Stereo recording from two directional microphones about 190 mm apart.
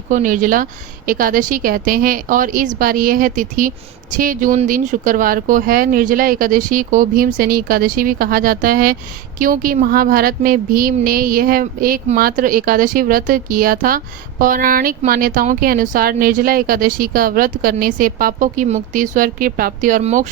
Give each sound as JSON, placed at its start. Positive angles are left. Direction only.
{"t": 0.1, "sound": "speech", "side_deg": -45}